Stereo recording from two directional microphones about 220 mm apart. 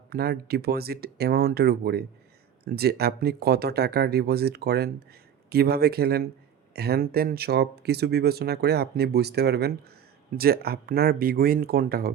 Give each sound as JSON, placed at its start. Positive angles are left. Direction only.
{"t": 0.1, "sound": "speech", "side_deg": -45}